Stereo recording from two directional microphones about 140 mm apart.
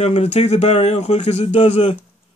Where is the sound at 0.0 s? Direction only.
50° left (ahead or behind).